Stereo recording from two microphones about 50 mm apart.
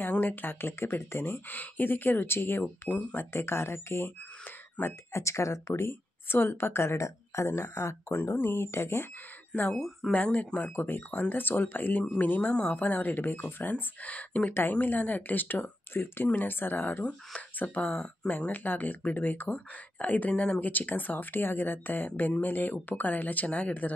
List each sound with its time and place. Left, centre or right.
0.0 s speech: left
1.5 s speech: left
2.9 s a woman's voice: left
3.2 s speech: left
4.8 s a woman's voice: left
5.1 s speech: left
6.2 s speech: left
9.8 s speech: centre
10.1 s speech: left
12.4 s a woman's voice: left
12.7 s speech: left
14.5 s speech: left
15.9 s speech: left